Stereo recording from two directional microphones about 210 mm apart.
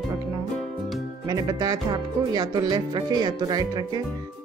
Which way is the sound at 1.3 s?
15° right (ahead or behind).